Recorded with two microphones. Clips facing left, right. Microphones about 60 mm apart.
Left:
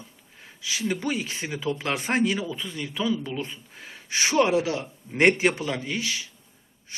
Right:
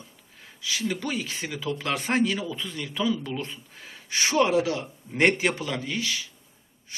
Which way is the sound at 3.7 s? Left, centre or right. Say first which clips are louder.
Left 1 dB; left.